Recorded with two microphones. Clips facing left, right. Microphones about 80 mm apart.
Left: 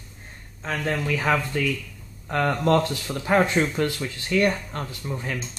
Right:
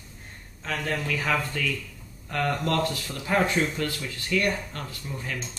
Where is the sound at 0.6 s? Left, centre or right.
Left.